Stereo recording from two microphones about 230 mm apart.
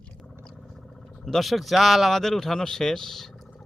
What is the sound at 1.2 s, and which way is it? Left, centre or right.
Speech, centre.